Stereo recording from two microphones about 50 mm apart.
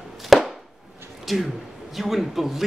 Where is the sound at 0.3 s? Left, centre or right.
Centre.